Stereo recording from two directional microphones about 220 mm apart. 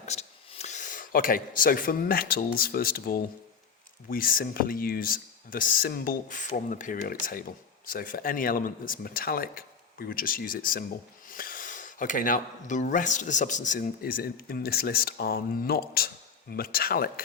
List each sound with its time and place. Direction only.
0.0 s speech: 30° left (ahead or behind)